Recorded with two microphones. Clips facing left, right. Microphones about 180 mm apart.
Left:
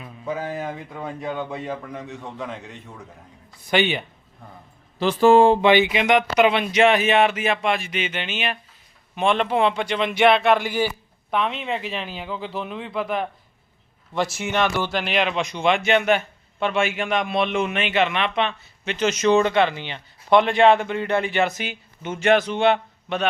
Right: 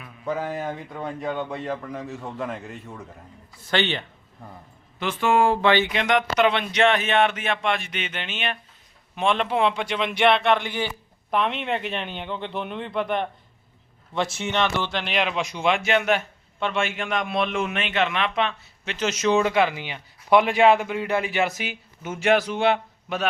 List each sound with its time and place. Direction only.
0.3 s speech: centre (ahead or behind)
3.6 s speech: 15° left (ahead or behind)
4.9 s speech: 35° left (ahead or behind)
5.6 s speech: 15° left (ahead or behind); by 23.3 s 5° right (ahead or behind)